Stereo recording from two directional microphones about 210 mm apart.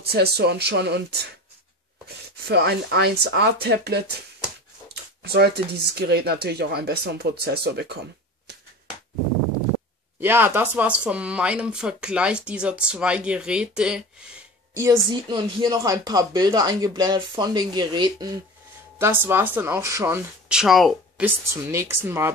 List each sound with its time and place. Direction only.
0.0 s speech: 50° right (ahead or behind)
2.4 s speech: 50° right (ahead or behind)
5.2 s speech: 50° right (ahead or behind)
10.2 s speech: 10° right (ahead or behind)
14.8 s speech: 20° right (ahead or behind)